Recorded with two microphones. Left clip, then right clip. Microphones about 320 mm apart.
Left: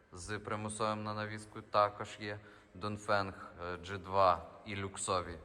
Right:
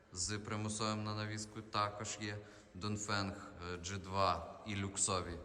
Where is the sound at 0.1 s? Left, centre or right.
Centre.